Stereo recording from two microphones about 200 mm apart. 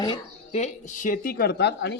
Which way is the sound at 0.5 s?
35° left (ahead or behind).